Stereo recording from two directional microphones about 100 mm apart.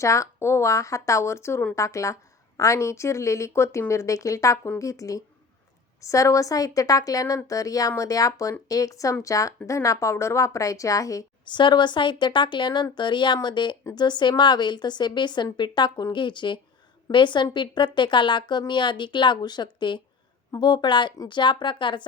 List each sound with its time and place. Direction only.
0.0 s a woman's voice: 30° left (ahead or behind)
11.4 s speech: 50° left (ahead or behind)